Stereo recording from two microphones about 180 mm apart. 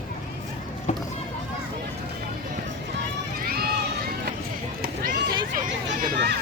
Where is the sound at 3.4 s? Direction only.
55° right (ahead or behind).